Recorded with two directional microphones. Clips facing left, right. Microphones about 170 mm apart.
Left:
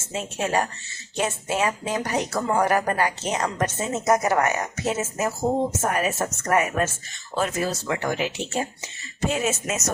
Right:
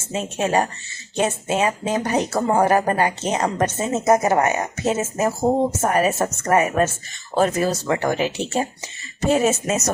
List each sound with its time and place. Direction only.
0.1 s speech: 20° right (ahead or behind)